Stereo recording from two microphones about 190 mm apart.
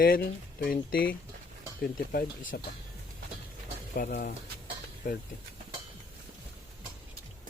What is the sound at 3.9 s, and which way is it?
Speech, 45° left (ahead or behind).